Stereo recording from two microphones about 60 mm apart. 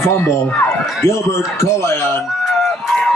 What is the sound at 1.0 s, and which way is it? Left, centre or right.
Speech, left.